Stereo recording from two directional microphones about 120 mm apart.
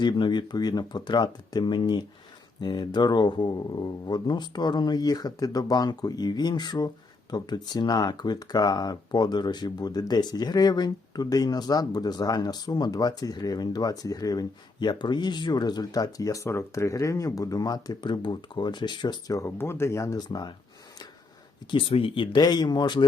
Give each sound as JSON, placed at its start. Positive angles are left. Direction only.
{"t": 0.0, "sound": "speech", "side_deg": 40}
{"t": 19.4, "sound": "speech", "side_deg": 20}
{"t": 21.7, "sound": "speech", "side_deg": 50}